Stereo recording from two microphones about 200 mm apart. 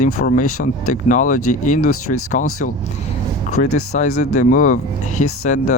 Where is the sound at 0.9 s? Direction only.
40° left (ahead or behind).